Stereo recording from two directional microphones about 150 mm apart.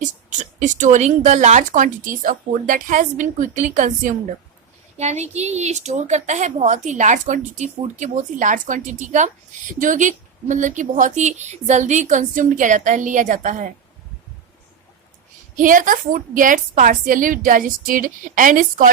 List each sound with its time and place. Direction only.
0.6 s a woman's voice: 55° right (ahead or behind)
15.5 s a woman's voice: 60° right (ahead or behind)